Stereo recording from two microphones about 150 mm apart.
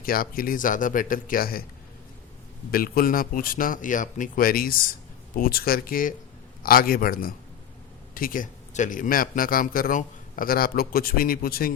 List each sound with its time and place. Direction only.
0.0 s a man's voice: 75° left (ahead or behind)
2.7 s a man's voice: 80° left